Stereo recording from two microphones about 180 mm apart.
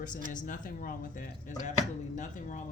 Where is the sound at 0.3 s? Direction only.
45° left (ahead or behind).